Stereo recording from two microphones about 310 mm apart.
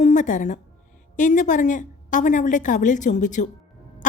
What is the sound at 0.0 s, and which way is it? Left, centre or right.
A woman's voice, left.